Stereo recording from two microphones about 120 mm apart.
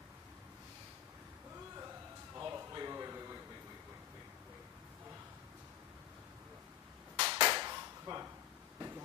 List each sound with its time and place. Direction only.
2.3 s a sound: 25° right (ahead or behind)
7.2 s cap gun: 40° right (ahead or behind)
8.7 s vehicle: 20° right (ahead or behind)